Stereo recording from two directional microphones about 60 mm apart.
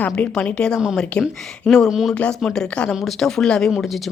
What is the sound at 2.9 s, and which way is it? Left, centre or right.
Speech, centre.